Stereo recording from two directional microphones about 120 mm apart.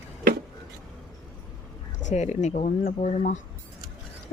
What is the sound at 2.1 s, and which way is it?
Speech, 75° left (ahead or behind).